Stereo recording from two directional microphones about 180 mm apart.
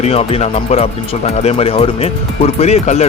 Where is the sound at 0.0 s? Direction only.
35° left (ahead or behind).